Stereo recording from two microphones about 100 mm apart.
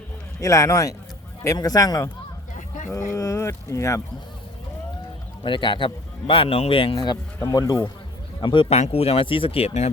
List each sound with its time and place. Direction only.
0.3 s a man's voice: 30° left (ahead or behind)
3.1 s speech: 30° left (ahead or behind)
5.4 s speech: 55° left (ahead or behind)
6.9 s a man's voice: 45° left (ahead or behind)
8.4 s speech: 50° left (ahead or behind)
8.7 s speech: 90° left